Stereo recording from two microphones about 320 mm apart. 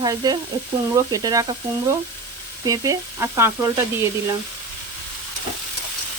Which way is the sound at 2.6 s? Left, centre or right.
Centre.